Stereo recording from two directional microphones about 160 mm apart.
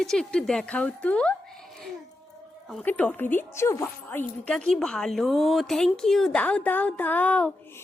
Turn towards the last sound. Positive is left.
turn(degrees=10)  # may be behind; listen again after turning